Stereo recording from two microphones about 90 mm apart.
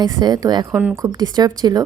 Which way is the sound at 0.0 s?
55° right (ahead or behind).